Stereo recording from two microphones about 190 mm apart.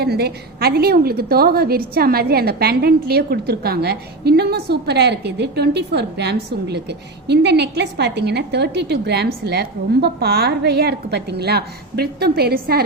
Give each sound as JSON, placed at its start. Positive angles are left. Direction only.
{"t": 0.0, "sound": "a woman's voice", "side_deg": -55}